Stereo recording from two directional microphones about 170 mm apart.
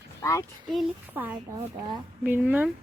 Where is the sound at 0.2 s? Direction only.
20° left (ahead or behind).